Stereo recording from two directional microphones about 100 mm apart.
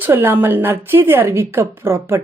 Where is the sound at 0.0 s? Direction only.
20° right (ahead or behind).